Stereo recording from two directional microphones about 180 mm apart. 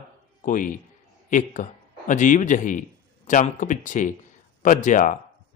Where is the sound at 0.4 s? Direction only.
50° left (ahead or behind).